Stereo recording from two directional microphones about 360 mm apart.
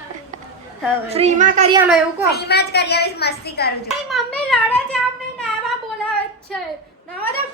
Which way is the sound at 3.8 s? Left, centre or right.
Centre.